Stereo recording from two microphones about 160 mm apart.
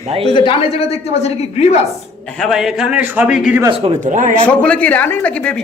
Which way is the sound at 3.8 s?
50° right (ahead or behind).